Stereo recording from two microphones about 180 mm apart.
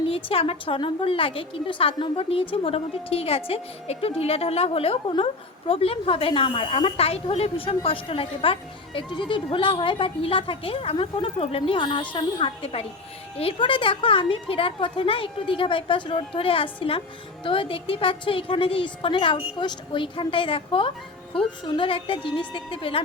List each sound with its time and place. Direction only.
0.1 s a woman's voice: 30° left (ahead or behind)